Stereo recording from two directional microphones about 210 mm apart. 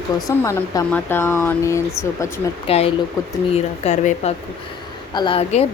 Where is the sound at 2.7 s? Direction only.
25° left (ahead or behind).